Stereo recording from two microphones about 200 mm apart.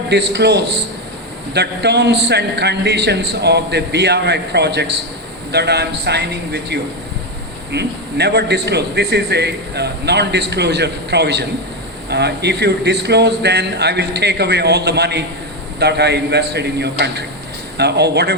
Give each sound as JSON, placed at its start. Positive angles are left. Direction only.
{"t": 0.1, "sound": "a man's voice", "side_deg": -60}